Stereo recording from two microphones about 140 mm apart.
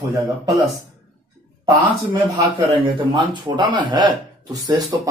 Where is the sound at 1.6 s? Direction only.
25° right (ahead or behind).